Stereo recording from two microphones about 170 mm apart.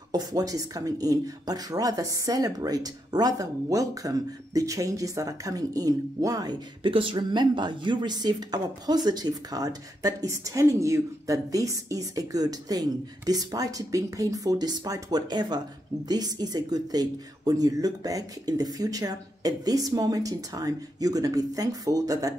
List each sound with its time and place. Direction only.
0.1 s speech: 20° right (ahead or behind)